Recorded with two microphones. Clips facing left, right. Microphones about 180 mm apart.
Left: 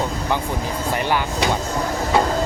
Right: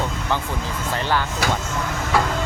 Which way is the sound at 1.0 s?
15° left (ahead or behind).